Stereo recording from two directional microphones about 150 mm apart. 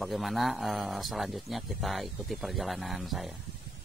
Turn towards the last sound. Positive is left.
turn(degrees=0)  # may be behind; listen again after turning